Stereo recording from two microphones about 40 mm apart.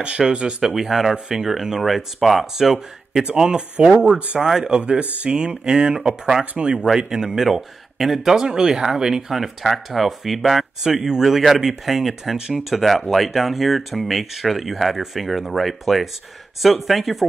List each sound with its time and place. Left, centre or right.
0.3 s speech: right
0.7 s speech: centre
3.3 s speech: right
6.5 s speech: right
6.8 s speech: centre